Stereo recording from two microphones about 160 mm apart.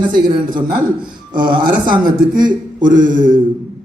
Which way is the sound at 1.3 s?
30° right (ahead or behind).